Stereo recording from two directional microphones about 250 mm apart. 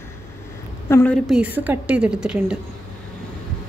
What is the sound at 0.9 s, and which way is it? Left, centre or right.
Speech, centre.